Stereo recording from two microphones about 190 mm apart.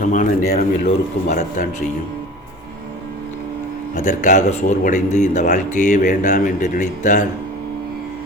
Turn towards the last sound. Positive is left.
turn(degrees=40)  # may be behind; listen again after turning